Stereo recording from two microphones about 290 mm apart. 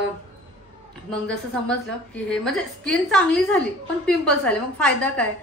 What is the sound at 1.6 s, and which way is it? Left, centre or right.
A woman's voice, centre.